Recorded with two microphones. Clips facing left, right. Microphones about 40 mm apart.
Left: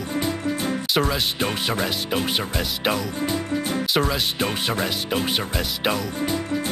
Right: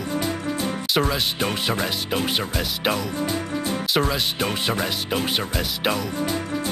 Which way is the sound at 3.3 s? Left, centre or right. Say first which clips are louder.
Left 1 dB; left.